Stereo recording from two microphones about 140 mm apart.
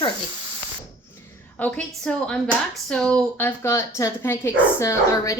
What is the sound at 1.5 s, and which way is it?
A woman's voice, 10° left (ahead or behind).